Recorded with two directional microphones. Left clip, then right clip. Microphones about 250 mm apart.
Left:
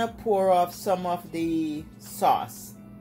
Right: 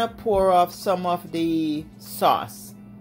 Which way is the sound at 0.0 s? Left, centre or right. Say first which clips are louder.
Right 3 dB; right.